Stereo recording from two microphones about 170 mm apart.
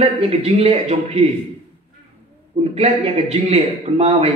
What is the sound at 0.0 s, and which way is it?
A man's voice, 40° right (ahead or behind).